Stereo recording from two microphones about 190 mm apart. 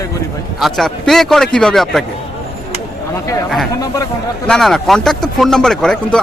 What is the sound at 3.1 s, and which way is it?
Speech, 15° left (ahead or behind).